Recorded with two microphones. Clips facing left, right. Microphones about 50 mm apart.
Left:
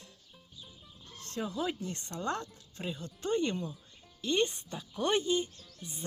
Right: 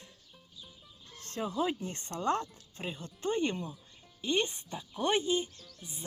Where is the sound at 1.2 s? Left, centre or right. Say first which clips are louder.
Right 2 dB; right.